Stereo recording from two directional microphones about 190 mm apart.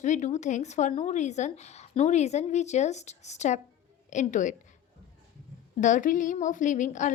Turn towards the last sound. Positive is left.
turn(degrees=40)  # may be behind; listen again after turning